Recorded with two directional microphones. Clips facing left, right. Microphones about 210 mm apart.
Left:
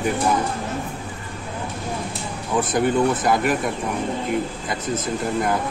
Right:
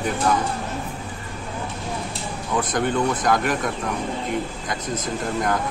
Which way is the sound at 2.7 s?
5° left (ahead or behind).